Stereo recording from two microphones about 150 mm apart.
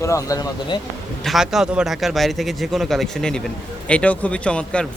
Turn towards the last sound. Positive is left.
turn(degrees=5)  # may be behind; listen again after turning